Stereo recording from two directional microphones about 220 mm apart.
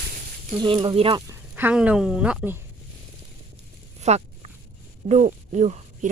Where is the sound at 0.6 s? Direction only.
20° right (ahead or behind).